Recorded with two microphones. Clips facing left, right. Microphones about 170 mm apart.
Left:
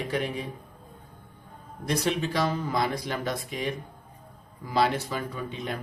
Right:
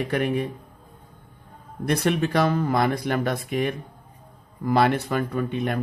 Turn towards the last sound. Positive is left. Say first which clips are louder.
# right 8 dB
turn(degrees=-60)  # may be behind; listen again after turning